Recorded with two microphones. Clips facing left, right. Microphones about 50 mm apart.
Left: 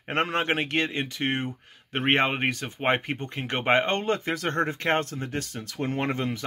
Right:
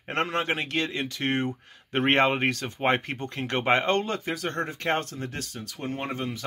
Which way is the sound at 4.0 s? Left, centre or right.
Left.